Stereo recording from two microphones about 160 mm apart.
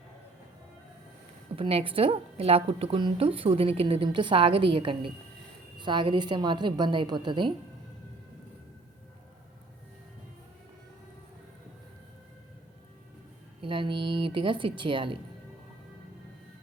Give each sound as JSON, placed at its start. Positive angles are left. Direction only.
{"t": 1.5, "sound": "a woman's voice", "side_deg": -35}
{"t": 13.6, "sound": "a woman's voice", "side_deg": -30}